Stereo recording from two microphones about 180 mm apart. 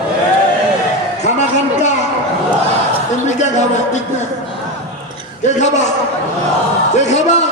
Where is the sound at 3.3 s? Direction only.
40° left (ahead or behind).